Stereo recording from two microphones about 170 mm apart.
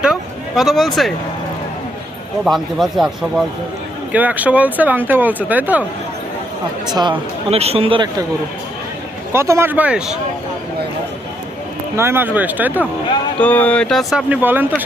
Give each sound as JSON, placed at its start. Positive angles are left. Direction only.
{"t": 0.0, "sound": "a sound", "side_deg": -5}
{"t": 2.4, "sound": "speech", "side_deg": 0}
{"t": 6.9, "sound": "speech", "side_deg": -25}
{"t": 9.3, "sound": "speech", "side_deg": -15}
{"t": 11.9, "sound": "speech", "side_deg": -15}
{"t": 13.4, "sound": "speech", "side_deg": 10}